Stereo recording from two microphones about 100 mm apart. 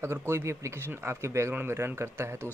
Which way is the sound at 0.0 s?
25° right (ahead or behind).